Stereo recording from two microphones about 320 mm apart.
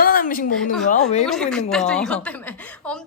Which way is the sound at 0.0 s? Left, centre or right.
Left.